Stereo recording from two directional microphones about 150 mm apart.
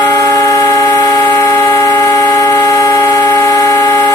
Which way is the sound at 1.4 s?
15° left (ahead or behind).